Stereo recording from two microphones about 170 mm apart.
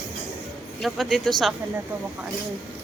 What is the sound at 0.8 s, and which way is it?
Speech, centre (ahead or behind).